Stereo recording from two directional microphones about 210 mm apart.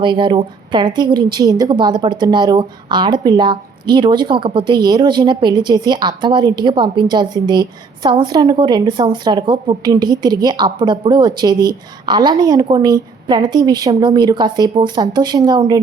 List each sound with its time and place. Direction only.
0.0 s a woman's voice: 20° right (ahead or behind)